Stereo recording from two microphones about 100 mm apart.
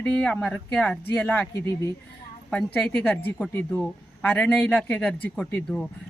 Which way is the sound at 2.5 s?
5° left (ahead or behind).